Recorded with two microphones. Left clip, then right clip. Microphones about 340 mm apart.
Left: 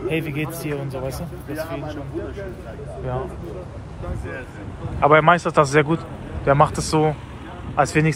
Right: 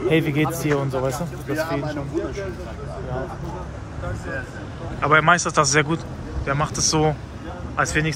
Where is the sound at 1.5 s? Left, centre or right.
Right.